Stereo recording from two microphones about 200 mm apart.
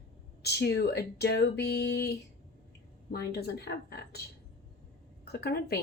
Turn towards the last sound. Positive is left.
turn(degrees=50)  # may be behind; listen again after turning